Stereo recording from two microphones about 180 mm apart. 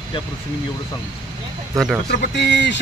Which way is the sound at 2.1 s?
70° left (ahead or behind).